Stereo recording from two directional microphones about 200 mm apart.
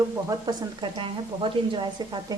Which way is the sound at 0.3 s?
20° right (ahead or behind).